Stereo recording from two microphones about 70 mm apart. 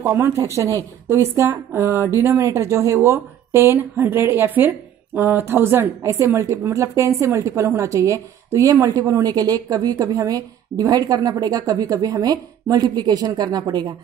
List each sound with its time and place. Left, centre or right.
0.0 s a woman's voice: right